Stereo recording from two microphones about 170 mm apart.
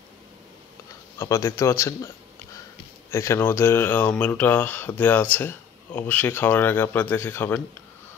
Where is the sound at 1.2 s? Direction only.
15° left (ahead or behind).